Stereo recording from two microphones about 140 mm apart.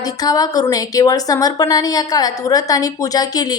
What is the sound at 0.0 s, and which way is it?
A woman's voice, 25° left (ahead or behind).